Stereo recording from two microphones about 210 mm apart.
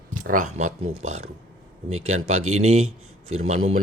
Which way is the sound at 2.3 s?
90° right.